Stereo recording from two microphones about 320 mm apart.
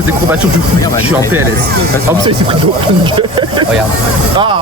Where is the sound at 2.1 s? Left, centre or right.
Centre.